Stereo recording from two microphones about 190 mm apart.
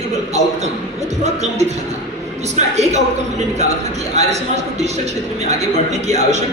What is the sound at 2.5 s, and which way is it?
Speech, 35° right (ahead or behind).